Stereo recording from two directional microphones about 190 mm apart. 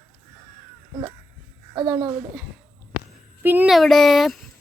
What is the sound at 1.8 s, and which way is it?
Speech, 20° right (ahead or behind).